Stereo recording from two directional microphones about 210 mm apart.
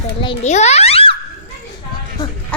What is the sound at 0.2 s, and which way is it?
Speech, 30° left (ahead or behind).